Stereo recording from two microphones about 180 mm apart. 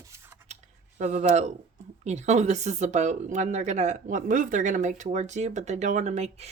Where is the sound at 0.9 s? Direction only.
40° right (ahead or behind).